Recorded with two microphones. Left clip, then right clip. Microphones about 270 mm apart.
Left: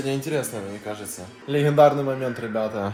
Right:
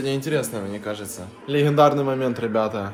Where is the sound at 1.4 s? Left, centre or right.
Centre.